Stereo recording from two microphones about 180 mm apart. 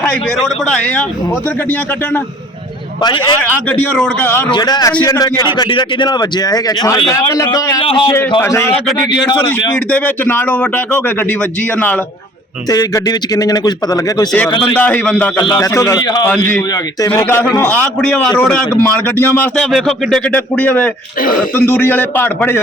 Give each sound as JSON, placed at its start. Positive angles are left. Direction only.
{"t": 0.0, "sound": "speech", "side_deg": 5}
{"t": 3.0, "sound": "a man's voice", "side_deg": 25}
{"t": 3.4, "sound": "a man's voice", "side_deg": 5}
{"t": 4.5, "sound": "a man's voice", "side_deg": 25}
{"t": 7.8, "sound": "a man's voice", "side_deg": 30}
{"t": 8.4, "sound": "a man's voice", "side_deg": 15}
{"t": 9.9, "sound": "a man's voice", "side_deg": 10}
{"t": 12.7, "sound": "a man's voice", "side_deg": 20}
{"t": 14.8, "sound": "a man's voice", "side_deg": 5}
{"t": 15.4, "sound": "a man's voice", "side_deg": 20}
{"t": 19.7, "sound": "speech", "side_deg": 0}
{"t": 20.3, "sound": "a man's voice", "side_deg": 10}